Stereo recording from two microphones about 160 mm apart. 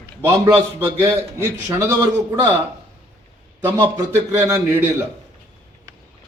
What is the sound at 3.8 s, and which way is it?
A man's voice, 20° right (ahead or behind).